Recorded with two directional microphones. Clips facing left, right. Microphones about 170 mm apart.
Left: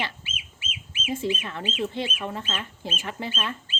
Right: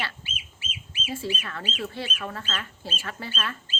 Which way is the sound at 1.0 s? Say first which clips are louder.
Left 4 dB; 20° left (ahead or behind).